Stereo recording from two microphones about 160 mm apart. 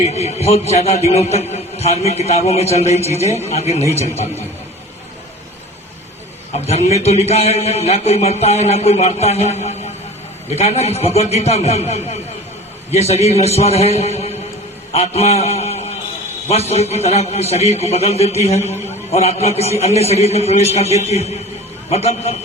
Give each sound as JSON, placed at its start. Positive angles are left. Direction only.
{"t": 0.1, "sound": "a man's voice", "side_deg": 40}
{"t": 6.7, "sound": "a man's voice", "side_deg": 40}
{"t": 9.6, "sound": "a sound", "side_deg": 45}
{"t": 10.5, "sound": "a man's voice", "side_deg": 40}